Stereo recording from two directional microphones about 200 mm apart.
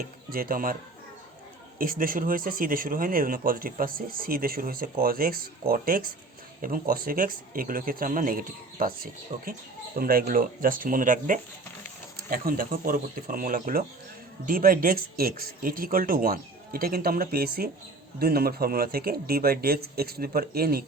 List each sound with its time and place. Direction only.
0.3 s speech: 45° right (ahead or behind)
1.8 s speech: 45° right (ahead or behind)